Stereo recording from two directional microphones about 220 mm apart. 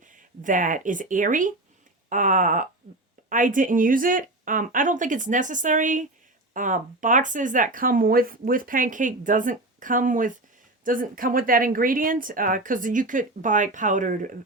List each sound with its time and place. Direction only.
0.1 s speech: 35° right (ahead or behind)